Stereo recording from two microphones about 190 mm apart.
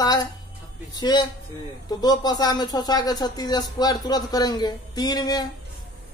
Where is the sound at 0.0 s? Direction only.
20° left (ahead or behind).